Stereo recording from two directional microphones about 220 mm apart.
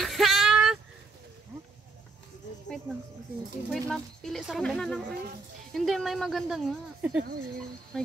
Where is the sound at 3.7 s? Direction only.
Centre (ahead or behind).